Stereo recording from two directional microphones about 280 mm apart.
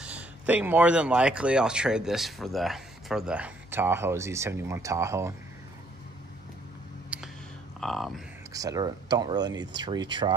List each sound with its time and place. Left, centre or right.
0.0 s speech: centre
7.1 s a sound: centre
7.8 s speech: centre
8.5 s speech: centre